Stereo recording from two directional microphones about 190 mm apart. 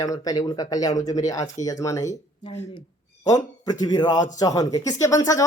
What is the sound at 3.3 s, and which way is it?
Speech, 20° left (ahead or behind).